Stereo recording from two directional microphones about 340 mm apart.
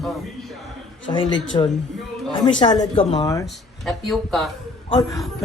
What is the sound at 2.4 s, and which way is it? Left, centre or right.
Speech, centre.